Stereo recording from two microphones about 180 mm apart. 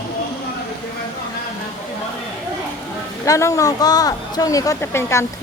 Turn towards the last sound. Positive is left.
turn(degrees=15)  # may be behind; listen again after turning